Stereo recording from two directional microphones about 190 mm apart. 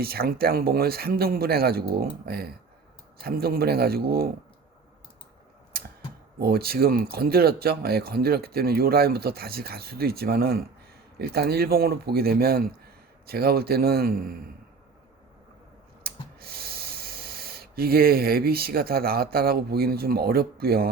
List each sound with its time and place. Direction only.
0.0 s speech: 55° right (ahead or behind)
6.4 s speech: 55° right (ahead or behind)
16.1 s a sound: 55° right (ahead or behind)
16.4 s speech: 55° right (ahead or behind)